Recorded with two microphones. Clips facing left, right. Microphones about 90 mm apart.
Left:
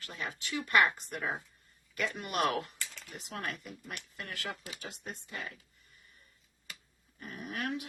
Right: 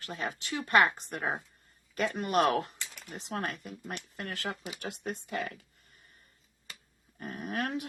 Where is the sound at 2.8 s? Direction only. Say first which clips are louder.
Right 2 dB; 25° right (ahead or behind); by 3.7 s 40° right (ahead or behind).